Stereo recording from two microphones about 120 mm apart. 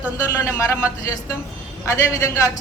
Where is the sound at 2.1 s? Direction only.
25° left (ahead or behind).